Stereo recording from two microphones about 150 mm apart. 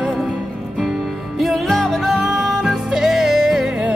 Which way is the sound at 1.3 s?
Centre (ahead or behind).